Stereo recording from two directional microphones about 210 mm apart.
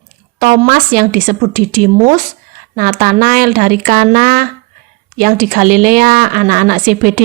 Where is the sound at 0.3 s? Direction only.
40° right (ahead or behind).